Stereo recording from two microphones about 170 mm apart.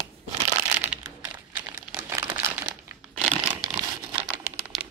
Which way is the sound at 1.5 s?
10° right (ahead or behind).